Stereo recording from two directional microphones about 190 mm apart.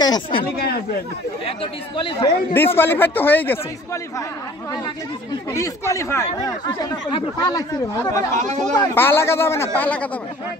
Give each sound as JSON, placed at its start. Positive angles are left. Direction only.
{"t": 0.0, "sound": "speech", "side_deg": 20}
{"t": 0.4, "sound": "speech", "side_deg": 55}
{"t": 1.4, "sound": "speech", "side_deg": 30}
{"t": 2.5, "sound": "speech", "side_deg": 10}
{"t": 5.5, "sound": "speech", "side_deg": 15}
{"t": 8.4, "sound": "speech", "side_deg": -40}
{"t": 8.7, "sound": "speech", "side_deg": 15}